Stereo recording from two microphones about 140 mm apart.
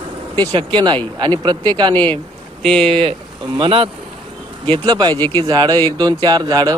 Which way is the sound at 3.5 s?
35° right (ahead or behind).